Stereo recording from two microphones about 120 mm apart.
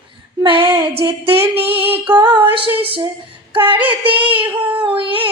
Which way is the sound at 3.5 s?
45° right (ahead or behind).